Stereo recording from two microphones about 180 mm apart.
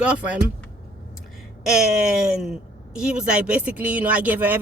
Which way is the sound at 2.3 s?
5° right (ahead or behind).